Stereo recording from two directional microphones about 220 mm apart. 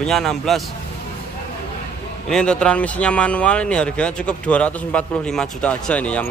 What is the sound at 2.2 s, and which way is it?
Speech, 5° left (ahead or behind).